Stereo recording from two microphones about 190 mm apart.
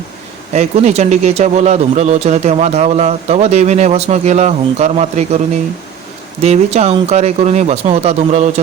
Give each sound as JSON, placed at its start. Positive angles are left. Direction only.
{"t": 0.5, "sound": "speech", "side_deg": -35}
{"t": 6.4, "sound": "speech", "side_deg": -35}